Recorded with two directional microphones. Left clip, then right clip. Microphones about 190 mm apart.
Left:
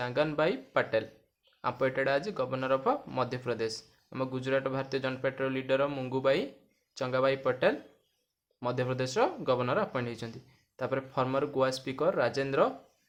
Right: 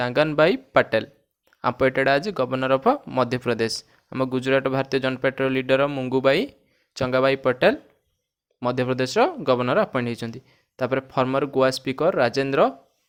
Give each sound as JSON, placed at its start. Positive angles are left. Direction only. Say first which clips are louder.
{"t": 0.0, "sound": "speech", "louder": "right 10 dB", "side_deg": -45}